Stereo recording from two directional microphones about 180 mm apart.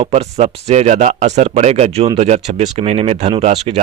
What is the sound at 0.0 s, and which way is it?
Speech, 35° right (ahead or behind).